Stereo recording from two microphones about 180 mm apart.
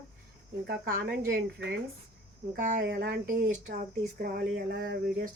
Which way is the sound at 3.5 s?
45° right (ahead or behind).